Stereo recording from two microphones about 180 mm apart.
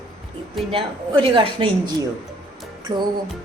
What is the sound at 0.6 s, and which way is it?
A woman's voice, 30° right (ahead or behind).